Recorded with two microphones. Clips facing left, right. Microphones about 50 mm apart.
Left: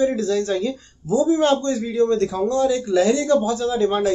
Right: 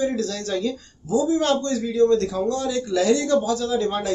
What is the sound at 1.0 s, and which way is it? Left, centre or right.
Speech, left.